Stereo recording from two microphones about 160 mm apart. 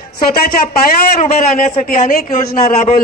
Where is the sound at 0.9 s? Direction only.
55° left (ahead or behind).